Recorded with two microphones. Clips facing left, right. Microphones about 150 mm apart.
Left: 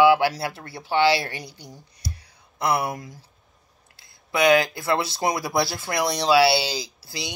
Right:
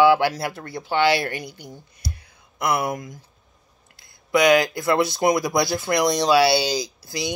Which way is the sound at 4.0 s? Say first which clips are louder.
Right 3 dB; 25° left (ahead or behind).